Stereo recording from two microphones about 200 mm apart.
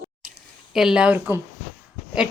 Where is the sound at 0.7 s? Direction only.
5° right (ahead or behind).